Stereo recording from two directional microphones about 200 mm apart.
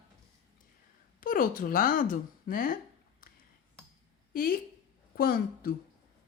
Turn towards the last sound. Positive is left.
turn(degrees=45)  # may be behind; listen again after turning